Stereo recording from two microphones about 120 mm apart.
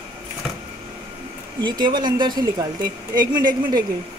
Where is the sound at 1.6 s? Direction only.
40° right (ahead or behind).